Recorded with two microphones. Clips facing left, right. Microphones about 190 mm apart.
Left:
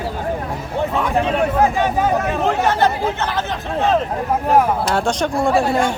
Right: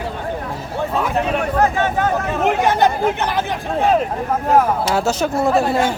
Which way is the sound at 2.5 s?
15° right (ahead or behind).